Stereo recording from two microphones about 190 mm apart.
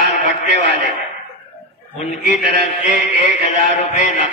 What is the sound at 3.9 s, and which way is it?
Speech, 35° left (ahead or behind).